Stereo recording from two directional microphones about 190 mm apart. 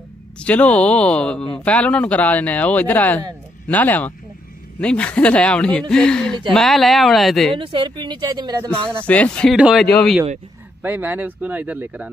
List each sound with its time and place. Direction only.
0.4 s speech: 5° left (ahead or behind)
7.5 s speech: 25° right (ahead or behind)
9.0 s speech: 5° left (ahead or behind)